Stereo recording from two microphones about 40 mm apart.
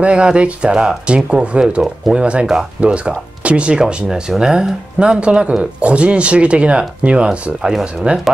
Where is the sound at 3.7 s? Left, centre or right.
Centre.